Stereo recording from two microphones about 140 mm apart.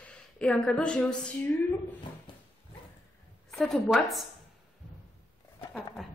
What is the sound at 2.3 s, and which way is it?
Dog, 35° left (ahead or behind).